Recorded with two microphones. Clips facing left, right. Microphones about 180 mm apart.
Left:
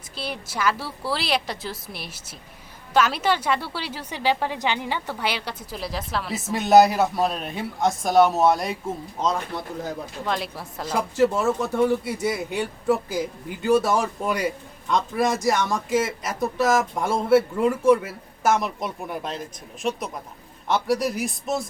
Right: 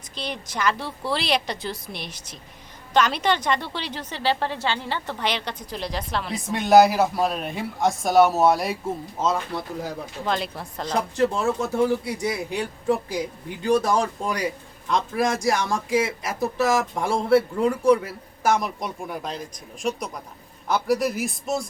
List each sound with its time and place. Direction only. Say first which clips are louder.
0.2 s a woman's voice: even; 5° left (ahead or behind)